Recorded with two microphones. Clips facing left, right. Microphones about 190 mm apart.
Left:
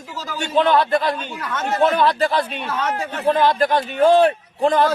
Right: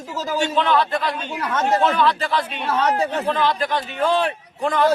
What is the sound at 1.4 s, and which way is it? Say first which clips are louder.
Speech: right 4 dB; 35° right (ahead or behind).